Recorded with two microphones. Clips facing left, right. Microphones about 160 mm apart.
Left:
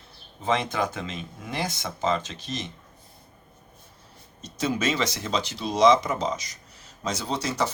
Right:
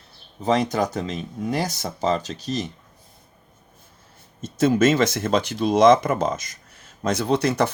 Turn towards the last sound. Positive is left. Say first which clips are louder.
# right 7 dB
turn(degrees=-55)  # may be behind; listen again after turning